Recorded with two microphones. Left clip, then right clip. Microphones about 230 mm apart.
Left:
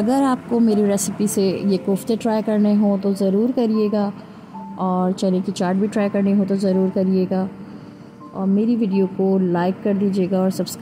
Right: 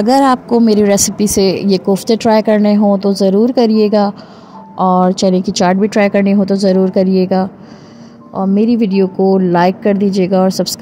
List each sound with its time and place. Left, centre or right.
0.0 s a woman's voice: right